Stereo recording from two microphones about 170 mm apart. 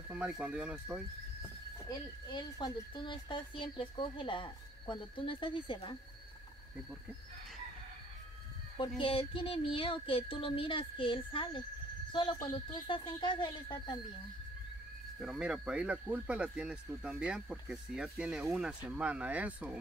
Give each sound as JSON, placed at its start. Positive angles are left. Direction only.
{"t": 0.1, "sound": "speech", "side_deg": -5}
{"t": 1.9, "sound": "speech", "side_deg": 25}
{"t": 9.0, "sound": "child singing", "side_deg": 30}
{"t": 12.1, "sound": "speech", "side_deg": 25}
{"t": 15.1, "sound": "speech", "side_deg": -5}